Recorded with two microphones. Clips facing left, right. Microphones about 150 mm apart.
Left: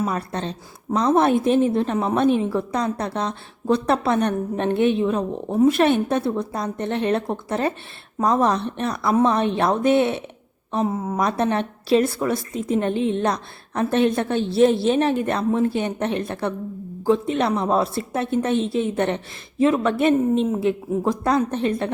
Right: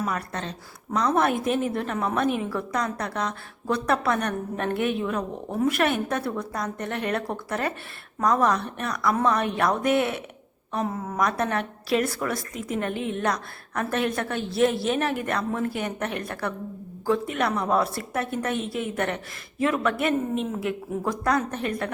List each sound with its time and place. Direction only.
0.0 s a woman's voice: 30° left (ahead or behind)